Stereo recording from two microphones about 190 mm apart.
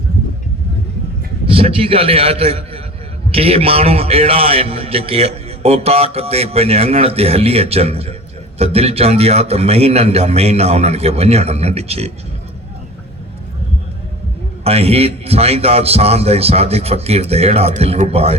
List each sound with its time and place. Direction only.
1.5 s a man's voice: 30° right (ahead or behind)
14.6 s a man's voice: 30° right (ahead or behind)